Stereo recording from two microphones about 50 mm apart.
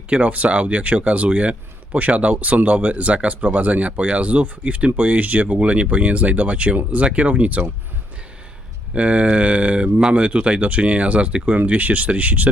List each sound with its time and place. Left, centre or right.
0.1 s speech: right
8.9 s speech: right